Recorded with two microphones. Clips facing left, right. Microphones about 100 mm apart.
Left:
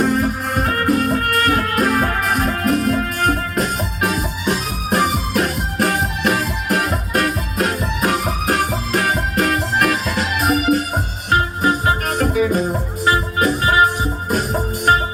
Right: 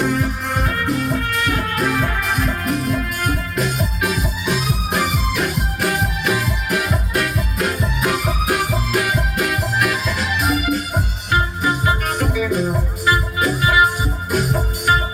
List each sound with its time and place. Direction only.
0.0 s music: 40° left (ahead or behind)